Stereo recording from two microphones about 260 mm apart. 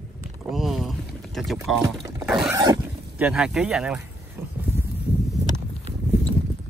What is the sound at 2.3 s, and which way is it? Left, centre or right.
Speech, centre.